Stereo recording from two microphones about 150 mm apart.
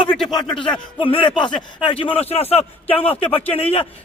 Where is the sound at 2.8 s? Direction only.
10° left (ahead or behind).